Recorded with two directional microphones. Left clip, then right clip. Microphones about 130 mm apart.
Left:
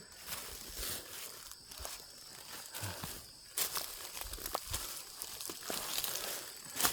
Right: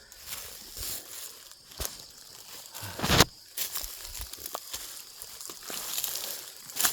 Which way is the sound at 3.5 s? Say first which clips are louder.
Right 2 dB; 20° right (ahead or behind).